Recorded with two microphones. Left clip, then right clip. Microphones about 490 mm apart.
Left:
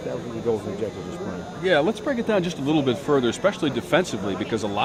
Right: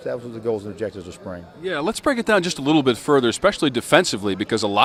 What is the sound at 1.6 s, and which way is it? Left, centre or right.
Speech, centre.